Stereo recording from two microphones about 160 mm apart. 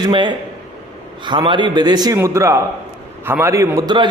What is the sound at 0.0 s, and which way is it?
A man's voice, 30° right (ahead or behind).